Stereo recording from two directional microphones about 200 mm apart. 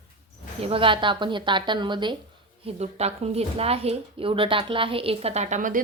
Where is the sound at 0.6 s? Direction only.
30° right (ahead or behind).